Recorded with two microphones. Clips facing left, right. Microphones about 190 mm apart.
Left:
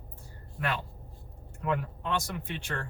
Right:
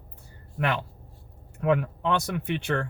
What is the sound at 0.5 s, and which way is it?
Speech, 70° right (ahead or behind).